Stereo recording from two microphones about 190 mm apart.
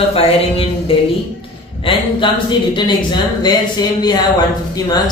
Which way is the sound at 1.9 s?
25° left (ahead or behind).